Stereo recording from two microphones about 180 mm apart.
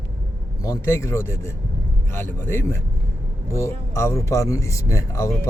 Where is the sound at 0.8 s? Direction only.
15° left (ahead or behind).